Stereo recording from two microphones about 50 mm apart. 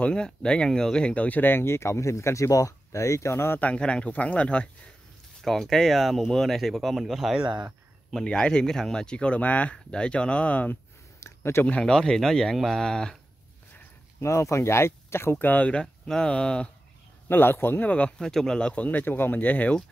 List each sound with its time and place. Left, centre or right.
0.0 s speech: centre; by 3.5 s left
3.7 s speech: left
5.4 s speech: centre
8.2 s speech: centre
11.1 s a sound: left
11.8 s speech: centre
14.2 s speech: left
15.3 s speech: left
15.6 s speech: left
17.3 s speech: left
17.7 s speech: left
18.2 s speech: centre
18.7 s speech: left
19.0 s speech: left